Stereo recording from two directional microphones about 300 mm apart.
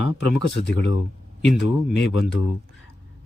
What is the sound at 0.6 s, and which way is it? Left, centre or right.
Speech, left.